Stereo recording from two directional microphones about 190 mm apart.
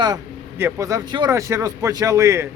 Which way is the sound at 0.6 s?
15° right (ahead or behind).